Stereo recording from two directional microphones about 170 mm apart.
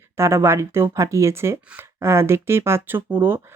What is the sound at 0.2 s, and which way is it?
Speech, 15° right (ahead or behind).